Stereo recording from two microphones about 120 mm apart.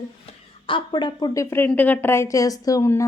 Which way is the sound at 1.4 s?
20° left (ahead or behind).